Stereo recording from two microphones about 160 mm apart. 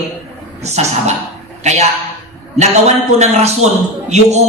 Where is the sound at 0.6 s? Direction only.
45° right (ahead or behind).